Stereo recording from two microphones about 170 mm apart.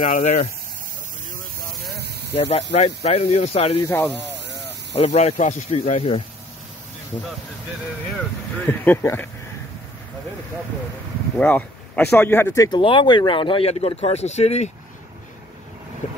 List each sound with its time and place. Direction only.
0.0 s speech: 45° left (ahead or behind)
2.5 s speech: 40° left (ahead or behind)
3.8 s speech: 15° left (ahead or behind)
4.9 s speech: 40° left (ahead or behind)
8.6 s speech: 10° left (ahead or behind)
11.3 s speech: 10° left (ahead or behind)
12.6 s speech: 30° left (ahead or behind)